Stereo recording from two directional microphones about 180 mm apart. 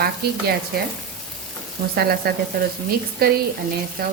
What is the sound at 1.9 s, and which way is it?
Speech, 60° right (ahead or behind).